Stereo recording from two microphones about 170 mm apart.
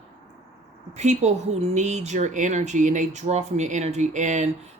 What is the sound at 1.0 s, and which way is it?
Speech, 40° right (ahead or behind).